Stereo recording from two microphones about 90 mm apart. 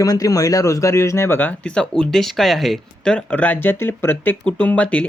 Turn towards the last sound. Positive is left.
turn(degrees=15)  # may be behind; listen again after turning